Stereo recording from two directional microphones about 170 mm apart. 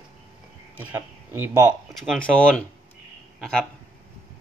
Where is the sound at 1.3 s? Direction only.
15° right (ahead or behind).